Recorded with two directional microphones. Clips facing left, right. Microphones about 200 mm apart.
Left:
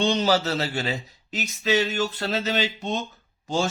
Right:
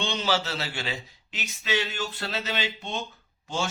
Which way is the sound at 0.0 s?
40° left (ahead or behind).